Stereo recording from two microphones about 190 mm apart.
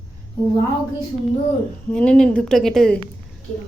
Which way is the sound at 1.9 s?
5° left (ahead or behind).